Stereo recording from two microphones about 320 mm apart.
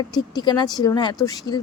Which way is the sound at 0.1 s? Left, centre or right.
Centre.